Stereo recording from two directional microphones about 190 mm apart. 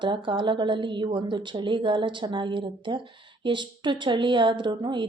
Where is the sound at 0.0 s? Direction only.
25° right (ahead or behind).